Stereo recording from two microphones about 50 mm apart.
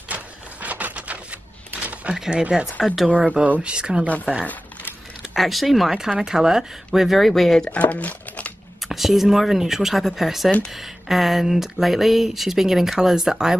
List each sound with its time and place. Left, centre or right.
0.1 s printer: right
2.1 s speech: centre
3.1 s speech: right
5.3 s speech: centre
7.0 s speech: centre
7.7 s a sound: left
8.8 s speech: centre